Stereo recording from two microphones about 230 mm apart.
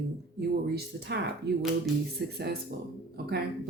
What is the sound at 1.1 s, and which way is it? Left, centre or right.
Speech, right.